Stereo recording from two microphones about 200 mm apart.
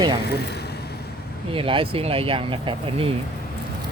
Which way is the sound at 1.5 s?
25° right (ahead or behind).